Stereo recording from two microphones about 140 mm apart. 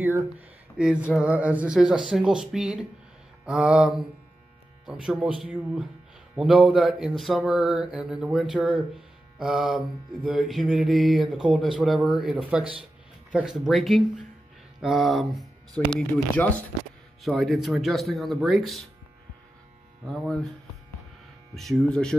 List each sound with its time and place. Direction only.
0.0 s a sound: 20° right (ahead or behind)
0.7 s mantra: 10° right (ahead or behind)
4.8 s speech: 5° right (ahead or behind)
6.3 s mantra: 5° right (ahead or behind)
14.8 s speech: centre (ahead or behind)
16.4 s speech: 10° left (ahead or behind)
17.2 s mantra: centre (ahead or behind)
20.1 s mantra: 5° left (ahead or behind)
21.5 s mantra: centre (ahead or behind)